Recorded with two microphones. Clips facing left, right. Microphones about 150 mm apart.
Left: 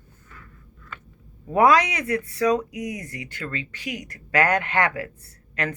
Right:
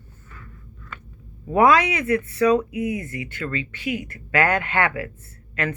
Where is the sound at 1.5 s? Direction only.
35° left (ahead or behind).